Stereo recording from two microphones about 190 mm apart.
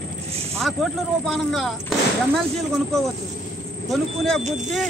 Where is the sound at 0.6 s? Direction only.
Centre (ahead or behind).